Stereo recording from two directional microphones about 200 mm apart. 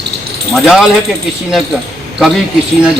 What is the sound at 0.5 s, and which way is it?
Speech, centre (ahead or behind).